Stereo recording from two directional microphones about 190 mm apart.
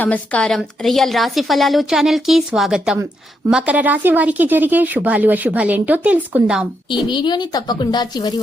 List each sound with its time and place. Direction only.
0.0 s a woman's voice: 5° left (ahead or behind)
7.1 s a woman's voice: 25° left (ahead or behind)